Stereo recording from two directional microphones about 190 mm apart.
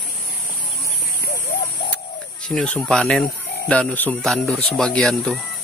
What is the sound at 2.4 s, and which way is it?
Speech, 5° left (ahead or behind).